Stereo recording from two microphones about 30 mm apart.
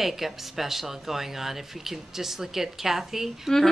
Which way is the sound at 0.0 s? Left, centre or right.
Centre.